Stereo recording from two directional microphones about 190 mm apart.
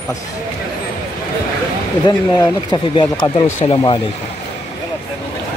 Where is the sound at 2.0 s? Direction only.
25° left (ahead or behind).